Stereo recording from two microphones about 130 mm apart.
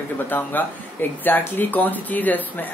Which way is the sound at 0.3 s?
15° left (ahead or behind).